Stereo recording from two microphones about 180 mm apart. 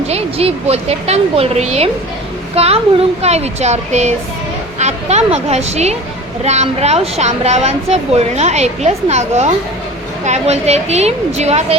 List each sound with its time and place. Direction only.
0.1 s a woman's voice: 35° right (ahead or behind)